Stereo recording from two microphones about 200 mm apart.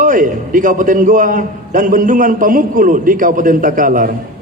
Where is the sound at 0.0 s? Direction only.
40° right (ahead or behind).